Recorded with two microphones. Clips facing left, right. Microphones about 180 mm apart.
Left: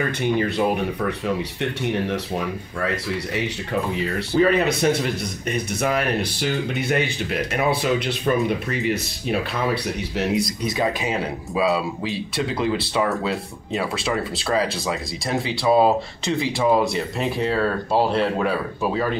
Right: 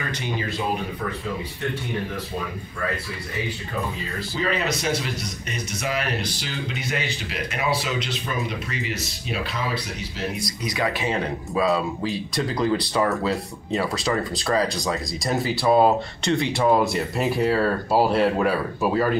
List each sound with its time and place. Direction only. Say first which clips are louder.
0.2 s speech: left 8 dB; 60° left (ahead or behind); by 2.4 s 75° left (ahead or behind)
3.9 s speech: left 8 dB; 60° left (ahead or behind)
10.1 s speech: left 8 dB; 80° left
11.1 s speech: even; 10° left (ahead or behind)